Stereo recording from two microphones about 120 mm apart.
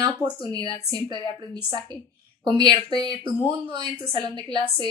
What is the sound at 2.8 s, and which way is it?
Speech, 50° left (ahead or behind).